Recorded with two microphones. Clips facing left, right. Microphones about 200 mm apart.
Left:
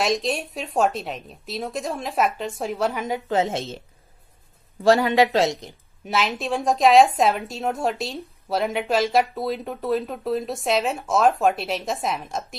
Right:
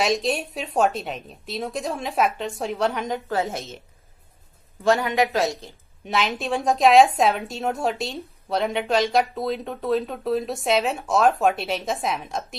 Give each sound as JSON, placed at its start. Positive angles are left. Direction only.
{"t": 0.0, "sound": "a woman's voice", "side_deg": 0}
{"t": 3.3, "sound": "a woman's voice", "side_deg": 20}
{"t": 4.8, "sound": "speech", "side_deg": 35}
{"t": 5.5, "sound": "a woman's voice", "side_deg": 15}
{"t": 6.0, "sound": "a woman's voice", "side_deg": 0}